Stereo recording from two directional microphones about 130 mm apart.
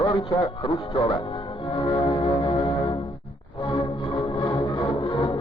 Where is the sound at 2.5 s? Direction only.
25° left (ahead or behind).